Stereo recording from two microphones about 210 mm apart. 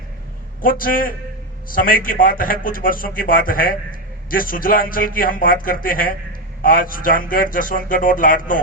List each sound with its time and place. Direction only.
0.6 s a man's voice: 40° left (ahead or behind)